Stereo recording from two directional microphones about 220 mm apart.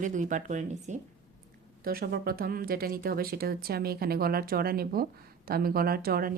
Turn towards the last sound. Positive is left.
turn(degrees=-40)  # may be behind; listen again after turning